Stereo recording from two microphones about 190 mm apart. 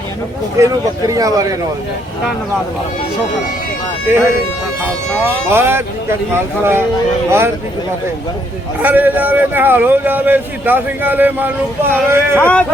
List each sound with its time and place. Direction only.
0.6 s a man's voice: 20° right (ahead or behind)
5.5 s a man's voice: 10° right (ahead or behind)
8.8 s a man's voice: 10° right (ahead or behind)
12.4 s speech: 5° left (ahead or behind)